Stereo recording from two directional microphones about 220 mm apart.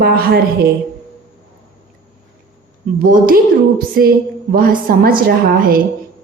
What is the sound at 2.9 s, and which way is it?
A woman's voice, 40° right (ahead or behind).